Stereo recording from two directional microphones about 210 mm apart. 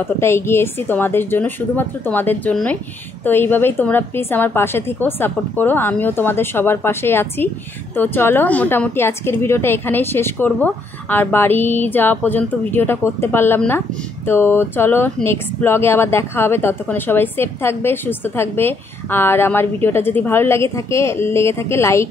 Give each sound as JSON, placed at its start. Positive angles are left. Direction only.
{"t": 0.0, "sound": "a woman's voice", "side_deg": 10}